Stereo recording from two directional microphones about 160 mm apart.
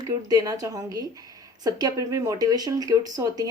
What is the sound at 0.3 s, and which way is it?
Speech, 25° right (ahead or behind).